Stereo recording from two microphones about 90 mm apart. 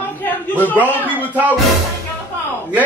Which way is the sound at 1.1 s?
20° right (ahead or behind).